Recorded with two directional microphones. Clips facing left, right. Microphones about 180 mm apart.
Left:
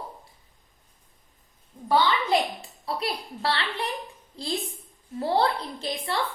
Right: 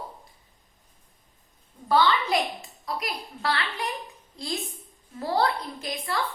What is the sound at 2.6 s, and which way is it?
A woman's voice, 30° left (ahead or behind).